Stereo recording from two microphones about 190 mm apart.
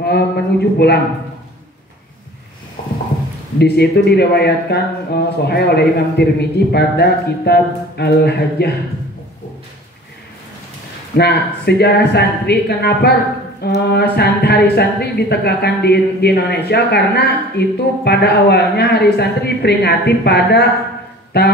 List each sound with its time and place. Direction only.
0.0 s speech: 60° left (ahead or behind)
3.5 s speech: 60° left (ahead or behind)
11.1 s speech: 60° left (ahead or behind)